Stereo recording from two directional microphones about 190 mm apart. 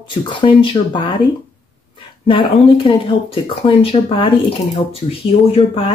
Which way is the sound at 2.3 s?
25° left (ahead or behind).